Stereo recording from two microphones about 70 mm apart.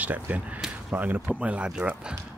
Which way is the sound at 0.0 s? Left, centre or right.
Right.